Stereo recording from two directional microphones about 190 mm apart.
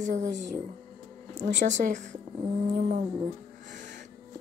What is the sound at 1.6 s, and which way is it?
Speech, 40° right (ahead or behind).